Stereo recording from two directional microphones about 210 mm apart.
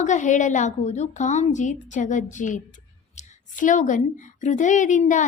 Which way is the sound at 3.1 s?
35° left (ahead or behind).